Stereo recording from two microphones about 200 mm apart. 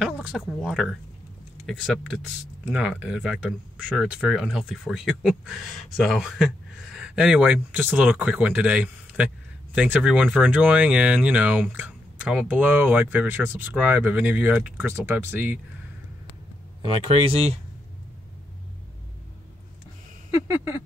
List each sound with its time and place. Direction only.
0.0 s speech: centre (ahead or behind)
16.8 s speech: 30° right (ahead or behind)
20.4 s speech: 10° right (ahead or behind)